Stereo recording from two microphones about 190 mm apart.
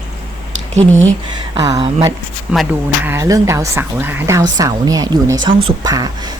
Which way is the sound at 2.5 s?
5° right (ahead or behind).